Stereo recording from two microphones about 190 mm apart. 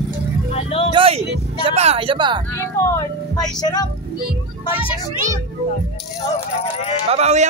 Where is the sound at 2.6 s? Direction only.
15° left (ahead or behind).